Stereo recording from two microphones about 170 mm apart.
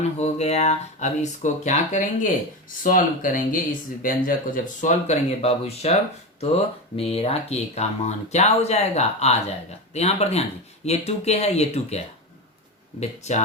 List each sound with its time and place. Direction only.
0.0 s speech: 40° left (ahead or behind)